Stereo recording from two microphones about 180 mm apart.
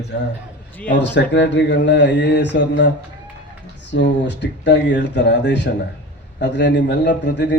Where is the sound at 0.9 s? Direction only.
75° left (ahead or behind).